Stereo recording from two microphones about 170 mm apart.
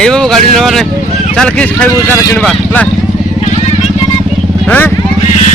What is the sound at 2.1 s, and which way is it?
Speech, 20° left (ahead or behind).